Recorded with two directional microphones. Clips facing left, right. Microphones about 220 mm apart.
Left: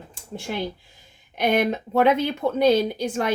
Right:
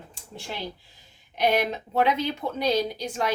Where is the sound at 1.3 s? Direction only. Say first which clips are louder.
Left 3 dB; 50° left (ahead or behind).